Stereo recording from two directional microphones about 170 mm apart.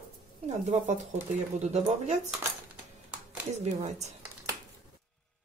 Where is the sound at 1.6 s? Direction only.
40° right (ahead or behind).